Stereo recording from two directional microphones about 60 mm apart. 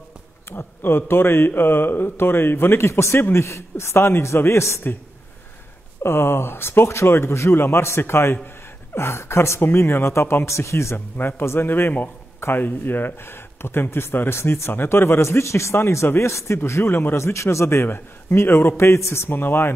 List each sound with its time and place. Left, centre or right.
0.5 s speech: left
2.9 s speech: left
6.0 s speech: left
11.1 s speech: left
17.8 s speech: left